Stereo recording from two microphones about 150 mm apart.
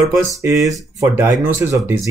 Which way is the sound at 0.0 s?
20° right (ahead or behind).